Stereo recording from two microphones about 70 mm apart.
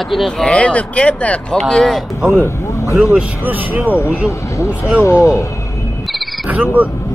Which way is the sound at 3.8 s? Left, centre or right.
Left.